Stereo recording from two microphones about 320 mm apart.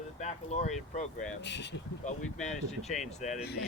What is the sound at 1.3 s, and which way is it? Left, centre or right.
Speech, left.